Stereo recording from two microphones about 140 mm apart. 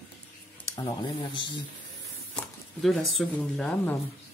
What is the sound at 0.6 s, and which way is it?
Speech, 30° left (ahead or behind).